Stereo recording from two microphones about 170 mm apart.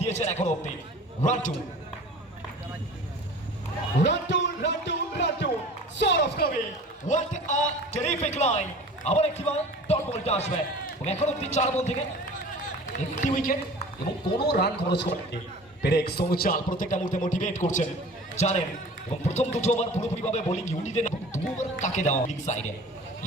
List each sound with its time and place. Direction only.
0.0 s a man's voice: 40° left (ahead or behind)
4.0 s speech: 90° left
7.1 s a man's voice: 45° left (ahead or behind)
13.2 s a man's voice: 50° left (ahead or behind)
14.4 s a man's voice: 75° left (ahead or behind); by 22.6 s 45° left (ahead or behind)